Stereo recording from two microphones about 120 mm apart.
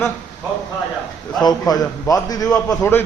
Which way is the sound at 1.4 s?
35° left (ahead or behind).